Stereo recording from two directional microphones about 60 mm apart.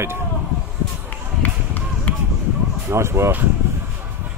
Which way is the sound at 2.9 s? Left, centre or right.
Right.